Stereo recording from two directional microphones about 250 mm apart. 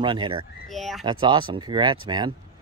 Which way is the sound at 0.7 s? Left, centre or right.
Centre.